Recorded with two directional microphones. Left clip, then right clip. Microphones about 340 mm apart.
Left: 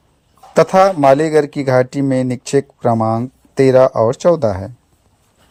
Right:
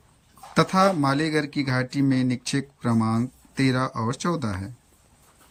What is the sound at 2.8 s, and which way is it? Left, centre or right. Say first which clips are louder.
Speech: left 7 dB; left.